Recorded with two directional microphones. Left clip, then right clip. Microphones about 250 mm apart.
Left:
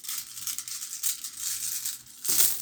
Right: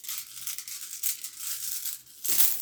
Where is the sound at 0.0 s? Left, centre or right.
Centre.